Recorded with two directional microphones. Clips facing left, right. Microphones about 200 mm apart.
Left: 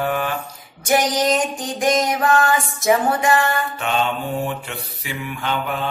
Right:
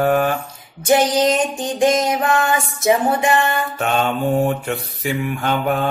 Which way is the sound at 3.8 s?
45° right (ahead or behind).